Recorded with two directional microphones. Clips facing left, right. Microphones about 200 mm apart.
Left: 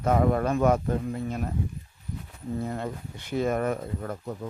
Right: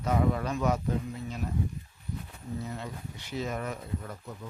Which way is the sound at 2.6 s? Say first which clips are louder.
Left 6 dB; 50° left (ahead or behind).